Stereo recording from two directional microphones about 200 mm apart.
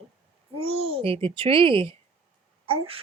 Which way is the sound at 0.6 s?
30° right (ahead or behind).